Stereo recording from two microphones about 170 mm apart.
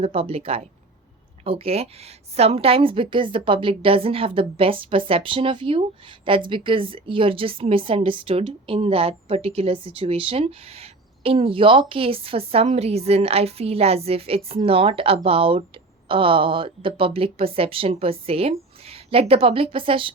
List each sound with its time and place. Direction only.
0.0 s a woman's voice: 35° right (ahead or behind)